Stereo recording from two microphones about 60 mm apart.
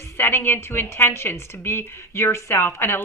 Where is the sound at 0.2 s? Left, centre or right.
Left.